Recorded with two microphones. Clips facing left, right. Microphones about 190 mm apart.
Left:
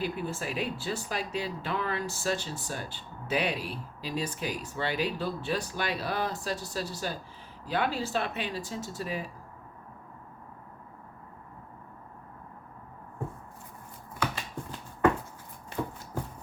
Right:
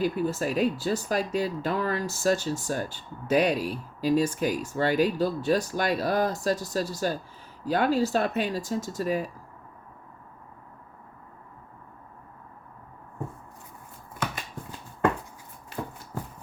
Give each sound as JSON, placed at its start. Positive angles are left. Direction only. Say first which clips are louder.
{"t": 0.0, "sound": "speech", "louder": "right 7 dB", "side_deg": -40}